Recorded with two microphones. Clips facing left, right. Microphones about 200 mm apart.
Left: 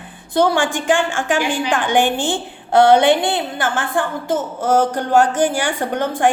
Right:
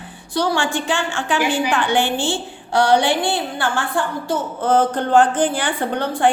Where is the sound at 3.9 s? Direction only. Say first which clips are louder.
Left 2 dB; 50° left (ahead or behind).